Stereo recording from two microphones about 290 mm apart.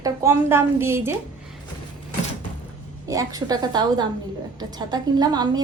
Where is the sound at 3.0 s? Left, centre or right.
Centre.